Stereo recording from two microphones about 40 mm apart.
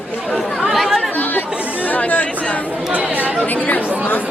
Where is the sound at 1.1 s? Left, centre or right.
Left.